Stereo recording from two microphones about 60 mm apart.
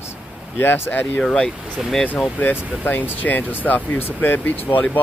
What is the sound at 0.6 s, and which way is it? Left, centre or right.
Speech, left.